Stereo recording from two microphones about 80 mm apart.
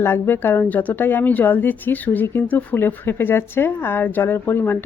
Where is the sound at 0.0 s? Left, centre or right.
Left.